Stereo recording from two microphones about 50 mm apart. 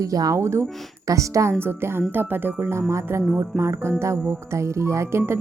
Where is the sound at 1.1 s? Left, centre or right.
Right.